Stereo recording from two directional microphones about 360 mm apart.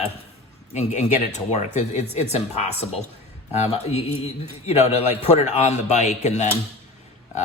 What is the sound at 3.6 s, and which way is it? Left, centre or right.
Speech, centre.